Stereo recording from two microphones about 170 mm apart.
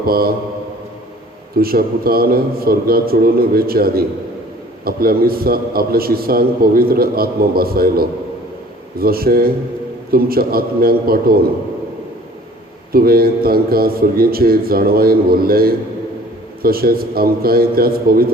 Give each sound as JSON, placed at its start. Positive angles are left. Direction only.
{"t": 0.0, "sound": "a man's voice", "side_deg": -60}
{"t": 1.5, "sound": "a man's voice", "side_deg": -60}
{"t": 12.9, "sound": "a man's voice", "side_deg": -60}